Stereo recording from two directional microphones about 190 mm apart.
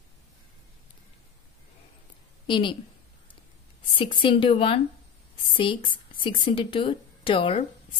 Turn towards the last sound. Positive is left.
turn(degrees=25)  # may be behind; listen again after turning